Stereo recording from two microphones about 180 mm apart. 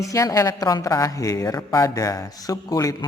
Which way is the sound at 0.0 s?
20° left (ahead or behind).